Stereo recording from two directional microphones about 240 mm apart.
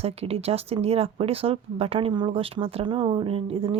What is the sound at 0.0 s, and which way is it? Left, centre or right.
Speech, right.